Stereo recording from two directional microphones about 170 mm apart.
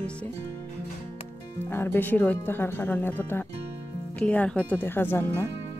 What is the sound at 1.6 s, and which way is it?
Speech, 15° left (ahead or behind).